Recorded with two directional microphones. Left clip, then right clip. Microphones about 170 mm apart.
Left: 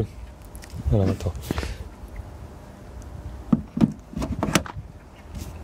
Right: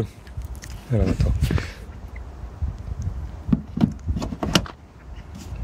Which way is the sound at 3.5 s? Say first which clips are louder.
Left 1 dB; 25° left (ahead or behind).